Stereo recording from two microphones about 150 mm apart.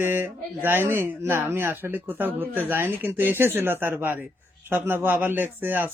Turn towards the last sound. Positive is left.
turn(degrees=-10)  # may be behind; listen again after turning